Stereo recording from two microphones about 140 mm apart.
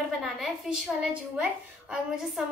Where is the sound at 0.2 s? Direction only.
Centre (ahead or behind).